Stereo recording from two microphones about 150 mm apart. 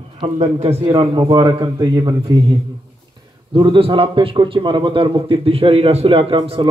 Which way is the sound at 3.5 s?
30° right (ahead or behind).